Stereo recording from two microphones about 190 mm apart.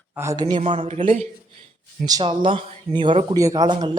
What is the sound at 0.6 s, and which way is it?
Speech, 35° right (ahead or behind).